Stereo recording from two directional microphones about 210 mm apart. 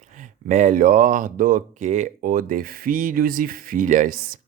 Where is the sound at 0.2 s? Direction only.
35° right (ahead or behind).